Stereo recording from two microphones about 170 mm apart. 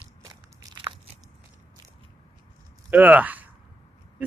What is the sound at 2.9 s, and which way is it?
Speech, 10° right (ahead or behind).